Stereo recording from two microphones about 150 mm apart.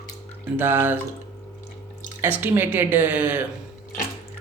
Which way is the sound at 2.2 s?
15° right (ahead or behind).